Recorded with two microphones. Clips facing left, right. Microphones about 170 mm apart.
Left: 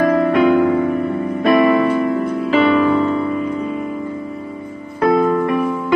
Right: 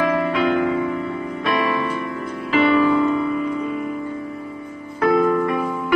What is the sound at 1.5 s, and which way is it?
Music, 40° left (ahead or behind).